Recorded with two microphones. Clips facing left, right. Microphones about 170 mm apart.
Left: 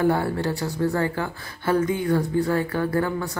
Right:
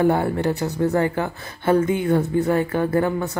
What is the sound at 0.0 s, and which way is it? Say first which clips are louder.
Speech: right 3 dB; 20° right (ahead or behind).